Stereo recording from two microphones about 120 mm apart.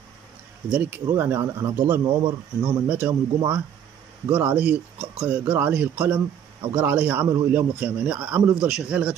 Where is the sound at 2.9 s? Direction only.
15° right (ahead or behind).